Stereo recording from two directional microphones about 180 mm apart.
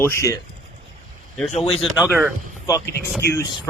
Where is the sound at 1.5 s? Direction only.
35° left (ahead or behind).